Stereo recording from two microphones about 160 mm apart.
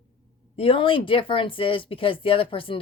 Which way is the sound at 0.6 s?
35° left (ahead or behind).